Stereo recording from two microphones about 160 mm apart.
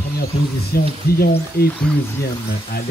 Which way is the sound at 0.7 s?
75° left (ahead or behind).